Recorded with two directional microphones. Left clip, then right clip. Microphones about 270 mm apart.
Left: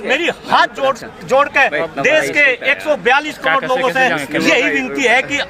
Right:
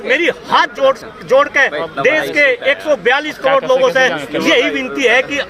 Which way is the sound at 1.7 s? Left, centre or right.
Left.